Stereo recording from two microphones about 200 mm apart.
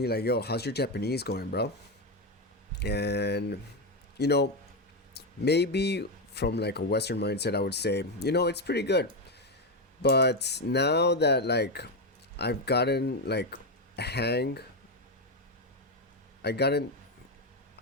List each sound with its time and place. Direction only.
0.0 s speech: 55° left (ahead or behind)
2.7 s speech: 55° left (ahead or behind)
16.4 s speech: 55° left (ahead or behind)